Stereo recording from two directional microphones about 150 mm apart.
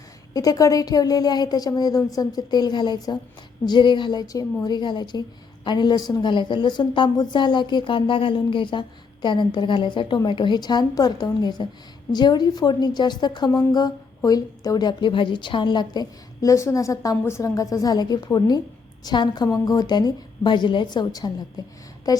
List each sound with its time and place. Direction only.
0.3 s a woman's voice: 25° left (ahead or behind)